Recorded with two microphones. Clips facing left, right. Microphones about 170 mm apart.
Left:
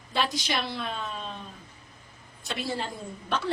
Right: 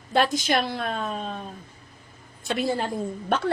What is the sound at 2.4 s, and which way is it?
Speech, 50° right (ahead or behind).